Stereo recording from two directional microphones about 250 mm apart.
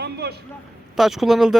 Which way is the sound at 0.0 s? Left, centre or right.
Right.